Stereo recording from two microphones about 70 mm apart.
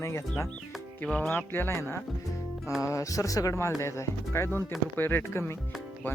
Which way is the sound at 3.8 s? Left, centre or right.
Left.